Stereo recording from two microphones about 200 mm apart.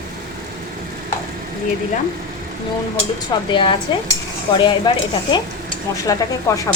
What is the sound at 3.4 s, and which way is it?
Speech, 25° left (ahead or behind).